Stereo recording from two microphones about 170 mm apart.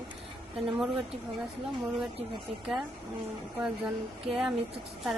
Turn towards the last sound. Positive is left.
turn(degrees=0)  # may be behind; listen again after turning